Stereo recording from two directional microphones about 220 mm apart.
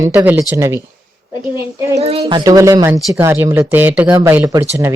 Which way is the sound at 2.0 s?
30° right (ahead or behind).